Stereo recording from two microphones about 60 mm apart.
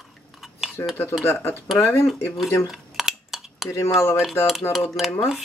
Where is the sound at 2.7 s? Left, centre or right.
Centre.